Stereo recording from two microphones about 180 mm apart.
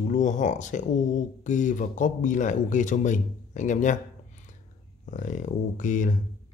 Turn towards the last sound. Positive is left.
turn(degrees=45)  # may be behind; listen again after turning